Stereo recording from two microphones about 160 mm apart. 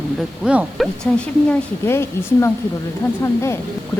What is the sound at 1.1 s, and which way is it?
Speech, 10° left (ahead or behind).